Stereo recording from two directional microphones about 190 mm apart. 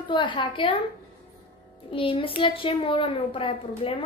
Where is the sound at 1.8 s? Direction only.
25° left (ahead or behind).